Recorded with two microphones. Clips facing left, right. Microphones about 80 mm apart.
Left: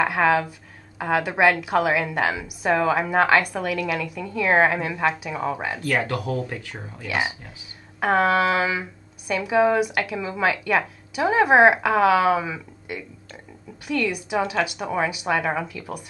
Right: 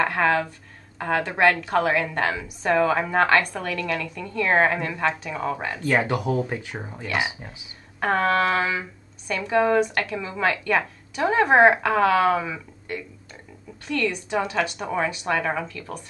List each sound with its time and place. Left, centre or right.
0.0 s a woman's voice: centre
5.9 s speech: centre
8.0 s a woman's voice: centre